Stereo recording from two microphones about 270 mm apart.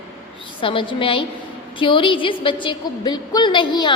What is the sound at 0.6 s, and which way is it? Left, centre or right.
A woman's voice, centre.